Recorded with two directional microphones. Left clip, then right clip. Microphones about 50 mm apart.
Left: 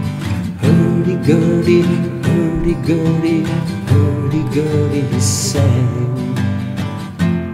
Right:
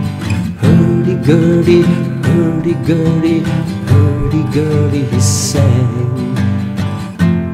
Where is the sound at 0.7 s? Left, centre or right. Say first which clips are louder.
Right 2 dB; right.